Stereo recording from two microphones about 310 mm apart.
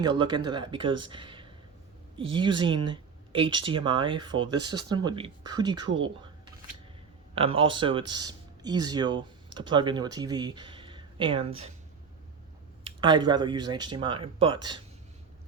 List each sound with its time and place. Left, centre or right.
0.0 s speech: centre
7.3 s speech: centre
12.8 s speech: centre